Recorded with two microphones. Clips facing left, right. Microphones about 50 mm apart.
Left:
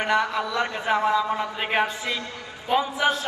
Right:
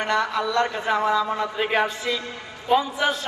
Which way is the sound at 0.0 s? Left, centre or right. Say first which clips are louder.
Even; centre.